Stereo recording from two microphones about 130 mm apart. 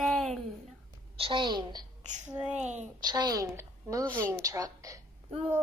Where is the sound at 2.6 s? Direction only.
65° right (ahead or behind).